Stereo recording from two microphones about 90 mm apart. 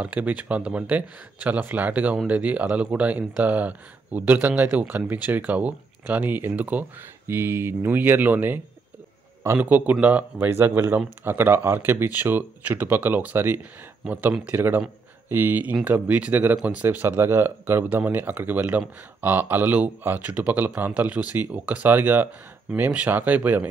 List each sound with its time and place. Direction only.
0.0 s speech: 15° right (ahead or behind)